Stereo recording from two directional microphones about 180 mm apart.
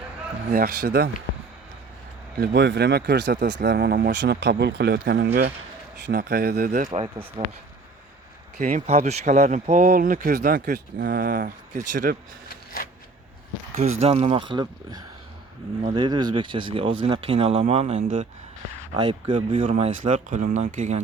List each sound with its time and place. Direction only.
0.5 s speech: 60° right (ahead or behind)
2.4 s speech: 70° right (ahead or behind)
4.2 s speech: 75° right (ahead or behind)
6.7 s speech: 40° right (ahead or behind)
7.0 s speech: 30° right (ahead or behind)
8.5 s speech: 45° right (ahead or behind)
12.8 s a sound: 55° left (ahead or behind)
13.7 s speech: 35° right (ahead or behind)
18.9 s speech: 25° right (ahead or behind)
19.6 s speech: 40° right (ahead or behind)